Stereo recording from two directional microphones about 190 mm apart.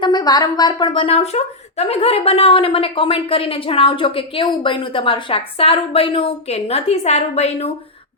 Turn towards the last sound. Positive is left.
turn(degrees=35)  # may be behind; listen again after turning